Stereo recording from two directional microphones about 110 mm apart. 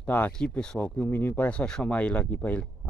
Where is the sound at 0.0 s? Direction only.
15° left (ahead or behind).